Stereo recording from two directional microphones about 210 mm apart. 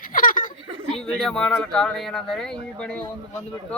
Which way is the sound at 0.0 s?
40° left (ahead or behind).